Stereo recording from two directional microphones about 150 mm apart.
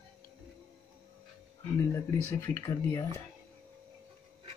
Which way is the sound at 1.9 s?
20° left (ahead or behind).